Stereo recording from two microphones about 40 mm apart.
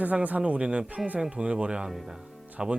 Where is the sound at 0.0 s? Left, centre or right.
Right.